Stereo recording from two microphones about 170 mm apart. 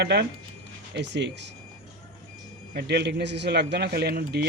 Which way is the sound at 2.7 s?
75° right (ahead or behind).